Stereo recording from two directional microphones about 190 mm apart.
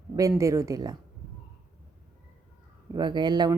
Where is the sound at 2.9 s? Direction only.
25° right (ahead or behind).